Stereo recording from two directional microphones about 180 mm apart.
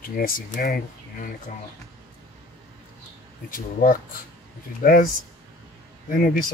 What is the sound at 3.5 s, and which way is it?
Speech, 55° left (ahead or behind).